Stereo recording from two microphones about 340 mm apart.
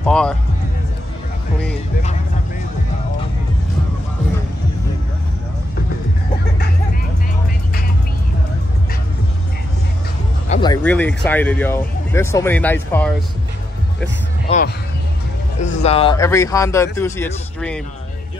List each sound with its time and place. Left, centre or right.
0.0 s music: centre
10.5 s speech: centre
14.0 s speech: left; by 17.8 s centre